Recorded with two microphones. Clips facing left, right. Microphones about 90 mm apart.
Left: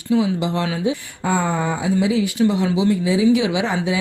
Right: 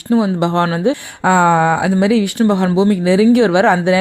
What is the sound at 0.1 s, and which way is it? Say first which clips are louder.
Speech: right 5 dB; 50° right (ahead or behind).